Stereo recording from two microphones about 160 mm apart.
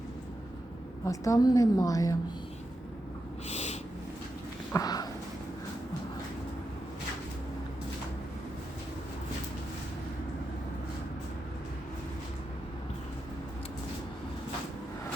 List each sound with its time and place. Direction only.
1.0 s a woman's voice: 20° left (ahead or behind)
3.5 s owl: 45° left (ahead or behind)
4.7 s a sound: 25° left (ahead or behind)